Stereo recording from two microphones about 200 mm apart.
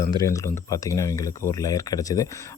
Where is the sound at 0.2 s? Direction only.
15° left (ahead or behind).